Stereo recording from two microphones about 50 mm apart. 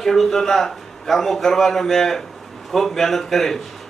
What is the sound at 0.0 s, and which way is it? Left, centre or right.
A man's voice, centre.